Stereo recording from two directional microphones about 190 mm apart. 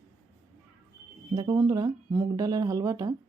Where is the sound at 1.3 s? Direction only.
20° right (ahead or behind).